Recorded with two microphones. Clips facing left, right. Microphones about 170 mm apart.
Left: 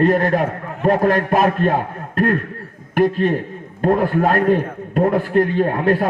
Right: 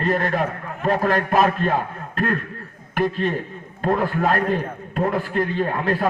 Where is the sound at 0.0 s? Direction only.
45° left (ahead or behind).